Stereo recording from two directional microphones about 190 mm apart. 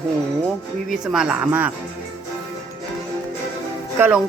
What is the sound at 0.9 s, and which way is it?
Speech, 5° right (ahead or behind).